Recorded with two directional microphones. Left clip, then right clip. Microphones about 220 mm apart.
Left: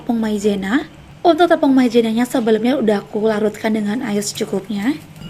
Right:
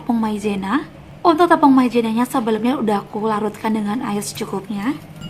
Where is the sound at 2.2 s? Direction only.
50° right (ahead or behind).